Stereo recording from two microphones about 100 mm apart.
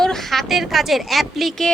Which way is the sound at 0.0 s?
5° left (ahead or behind).